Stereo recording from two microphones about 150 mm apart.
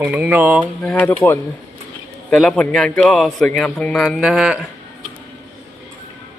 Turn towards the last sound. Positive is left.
turn(degrees=-5)  # may be behind; listen again after turning